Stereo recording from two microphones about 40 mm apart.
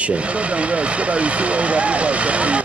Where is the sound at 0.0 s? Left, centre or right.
Right.